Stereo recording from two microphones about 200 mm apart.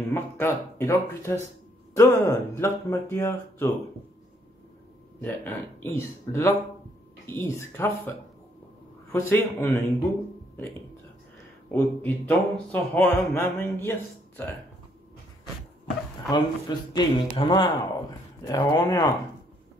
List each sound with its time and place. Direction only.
0.1 s speech: 10° left (ahead or behind)
5.2 s speech: 10° left (ahead or behind)
9.1 s speech: 10° left (ahead or behind)
11.7 s speech: 10° left (ahead or behind)
16.3 s a man's voice: 20° left (ahead or behind)